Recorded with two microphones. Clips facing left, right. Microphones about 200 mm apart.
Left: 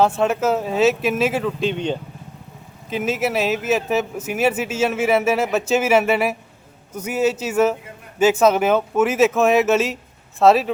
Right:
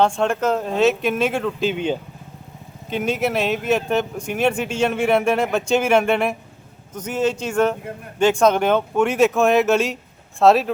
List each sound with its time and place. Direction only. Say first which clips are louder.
0.0 s speech: left 1 dB; 5° left (ahead or behind)